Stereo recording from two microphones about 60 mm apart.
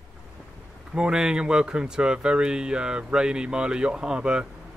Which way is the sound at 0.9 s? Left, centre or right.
Centre.